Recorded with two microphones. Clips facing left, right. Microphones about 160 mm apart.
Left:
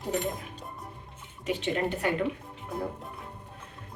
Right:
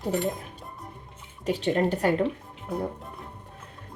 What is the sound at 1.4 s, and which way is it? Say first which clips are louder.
Speech: right 5 dB; 35° right (ahead or behind).